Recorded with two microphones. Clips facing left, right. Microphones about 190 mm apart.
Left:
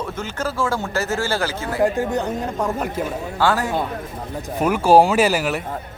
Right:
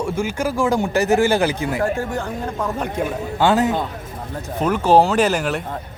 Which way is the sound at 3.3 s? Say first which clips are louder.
Right 4 dB; 20° right (ahead or behind).